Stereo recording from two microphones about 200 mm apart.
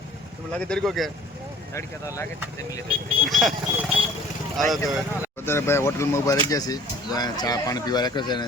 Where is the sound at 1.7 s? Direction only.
15° left (ahead or behind).